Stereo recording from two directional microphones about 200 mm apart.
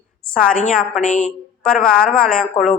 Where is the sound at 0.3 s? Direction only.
40° left (ahead or behind).